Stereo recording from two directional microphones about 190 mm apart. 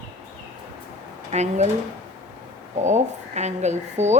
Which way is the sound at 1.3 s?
35° right (ahead or behind).